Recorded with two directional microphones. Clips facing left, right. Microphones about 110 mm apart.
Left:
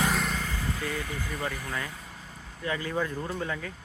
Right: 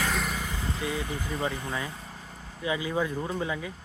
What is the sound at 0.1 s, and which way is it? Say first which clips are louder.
Vehicle: left 1 dB; centre (ahead or behind).